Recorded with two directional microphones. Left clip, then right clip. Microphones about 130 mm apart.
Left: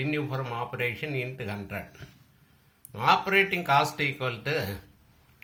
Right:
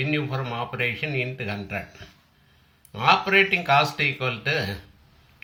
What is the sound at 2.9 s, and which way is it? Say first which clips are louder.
Speech: right 4 dB; 30° left (ahead or behind).